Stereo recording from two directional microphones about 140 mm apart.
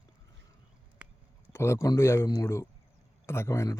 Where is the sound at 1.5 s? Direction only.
20° left (ahead or behind).